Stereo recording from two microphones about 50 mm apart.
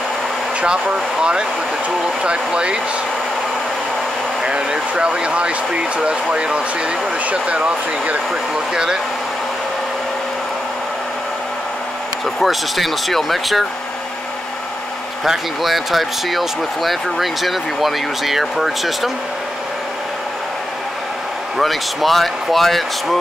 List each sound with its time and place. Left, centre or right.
0.6 s speech: centre
4.4 s speech: centre
8.7 s speech: centre
12.4 s speech: centre
15.2 s speech: centre
21.5 s speech: centre